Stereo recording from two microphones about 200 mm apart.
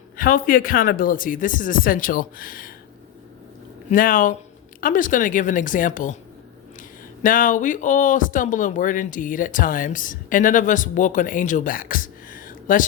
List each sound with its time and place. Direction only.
0.2 s speech: 45° left (ahead or behind)
3.8 s speech: 45° left (ahead or behind)
7.2 s speech: 40° left (ahead or behind)